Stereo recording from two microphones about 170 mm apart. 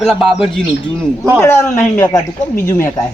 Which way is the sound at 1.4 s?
15° left (ahead or behind).